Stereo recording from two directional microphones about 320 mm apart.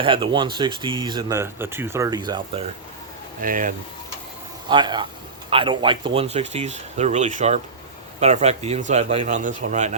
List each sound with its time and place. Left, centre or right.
0.0 s speech: centre
3.4 s speech: right
4.7 s speech: centre